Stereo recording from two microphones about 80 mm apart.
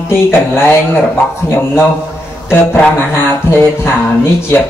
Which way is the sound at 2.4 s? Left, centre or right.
Left.